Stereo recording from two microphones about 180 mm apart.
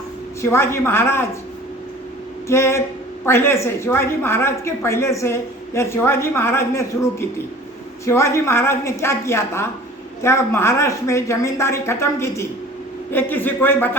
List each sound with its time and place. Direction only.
0.4 s a woman's voice: 15° left (ahead or behind)
2.5 s a woman's voice: 15° left (ahead or behind)